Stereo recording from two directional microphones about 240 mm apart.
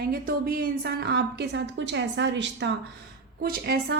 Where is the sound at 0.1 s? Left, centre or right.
Right.